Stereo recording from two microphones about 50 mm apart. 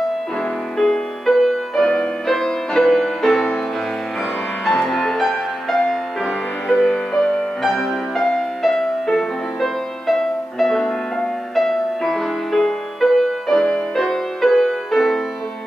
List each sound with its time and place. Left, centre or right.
0.7 s music: centre
4.6 s music: centre
13.6 s music: left
13.9 s music: centre